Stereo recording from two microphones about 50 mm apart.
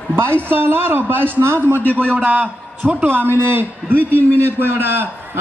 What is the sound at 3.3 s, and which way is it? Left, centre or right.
A man's voice, right.